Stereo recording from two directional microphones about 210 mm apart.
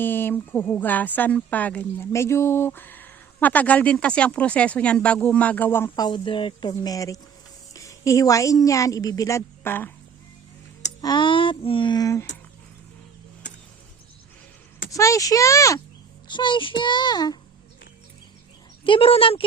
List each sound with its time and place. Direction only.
0.0 s a woman's voice: 10° left (ahead or behind)
11.0 s child singing: 20° left (ahead or behind)
14.8 s a woman's voice: 15° left (ahead or behind)
16.3 s child singing: 20° left (ahead or behind)
18.9 s child singing: 25° left (ahead or behind)